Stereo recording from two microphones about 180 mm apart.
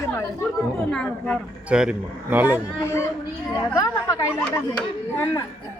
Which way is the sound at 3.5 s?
20° left (ahead or behind).